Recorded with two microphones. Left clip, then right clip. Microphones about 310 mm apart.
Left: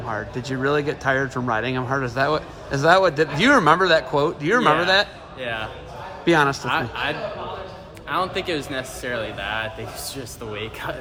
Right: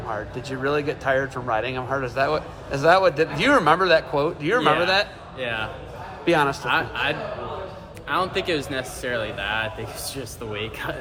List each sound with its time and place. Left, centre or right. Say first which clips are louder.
0.4 s speech: left 2 dB; left
5.4 s speech: right 1 dB; centre
6.2 s speech: left 2 dB; left
6.7 s speech: right 1 dB; centre